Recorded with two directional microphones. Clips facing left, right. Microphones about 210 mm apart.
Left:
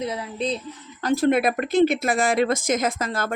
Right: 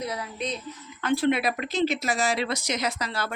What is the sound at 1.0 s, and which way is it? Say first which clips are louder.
Speech: left 4 dB; 45° left (ahead or behind).